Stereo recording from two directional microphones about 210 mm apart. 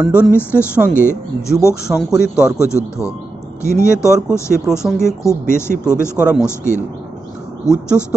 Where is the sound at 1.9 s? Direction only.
5° right (ahead or behind).